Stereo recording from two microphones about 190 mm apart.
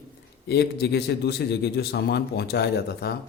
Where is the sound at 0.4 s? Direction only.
60° left (ahead or behind).